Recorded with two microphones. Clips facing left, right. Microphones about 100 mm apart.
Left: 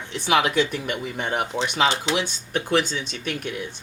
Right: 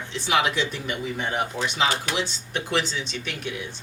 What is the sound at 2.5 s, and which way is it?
Speech, 45° left (ahead or behind).